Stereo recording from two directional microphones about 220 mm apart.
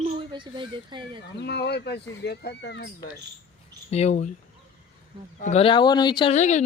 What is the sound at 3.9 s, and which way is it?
Speech, 30° left (ahead or behind).